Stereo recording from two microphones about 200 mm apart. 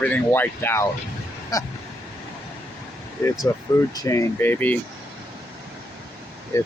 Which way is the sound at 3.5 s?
15° left (ahead or behind).